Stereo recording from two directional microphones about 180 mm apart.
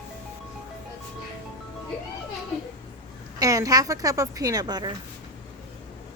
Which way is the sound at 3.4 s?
20° right (ahead or behind).